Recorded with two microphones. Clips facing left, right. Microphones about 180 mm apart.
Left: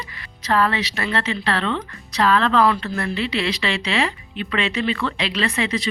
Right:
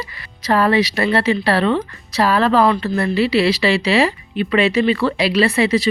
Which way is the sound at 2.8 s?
35° right (ahead or behind).